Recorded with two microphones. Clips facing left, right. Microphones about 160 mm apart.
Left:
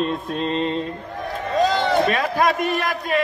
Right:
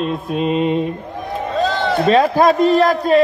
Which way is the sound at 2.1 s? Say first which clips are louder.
Right 8 dB; 30° right (ahead or behind).